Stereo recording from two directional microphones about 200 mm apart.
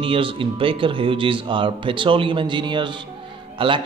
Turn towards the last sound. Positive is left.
turn(degrees=-25)  # may be behind; listen again after turning